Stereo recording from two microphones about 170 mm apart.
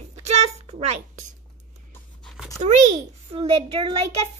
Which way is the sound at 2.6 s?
40° right (ahead or behind).